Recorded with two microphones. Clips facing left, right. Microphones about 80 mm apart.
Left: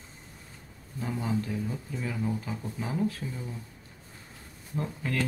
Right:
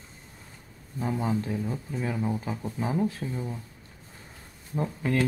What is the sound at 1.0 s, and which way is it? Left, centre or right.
Speech, right.